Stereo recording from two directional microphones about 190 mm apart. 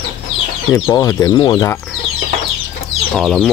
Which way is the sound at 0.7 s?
15° left (ahead or behind).